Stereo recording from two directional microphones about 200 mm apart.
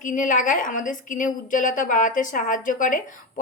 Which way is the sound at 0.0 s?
40° left (ahead or behind).